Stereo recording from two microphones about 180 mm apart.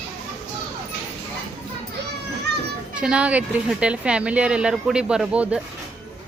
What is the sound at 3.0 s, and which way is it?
Speech, 5° right (ahead or behind).